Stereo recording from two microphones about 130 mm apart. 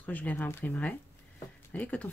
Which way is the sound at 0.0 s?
15° left (ahead or behind).